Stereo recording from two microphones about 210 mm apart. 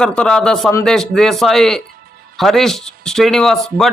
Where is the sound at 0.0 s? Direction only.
5° left (ahead or behind).